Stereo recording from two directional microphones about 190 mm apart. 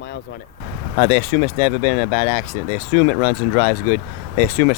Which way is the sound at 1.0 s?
50° left (ahead or behind).